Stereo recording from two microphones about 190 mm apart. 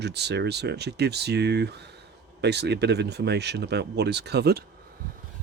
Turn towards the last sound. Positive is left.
turn(degrees=-60)  # may be behind; listen again after turning